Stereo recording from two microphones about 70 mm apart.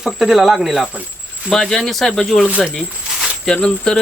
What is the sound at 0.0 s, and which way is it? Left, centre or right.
Speech, centre.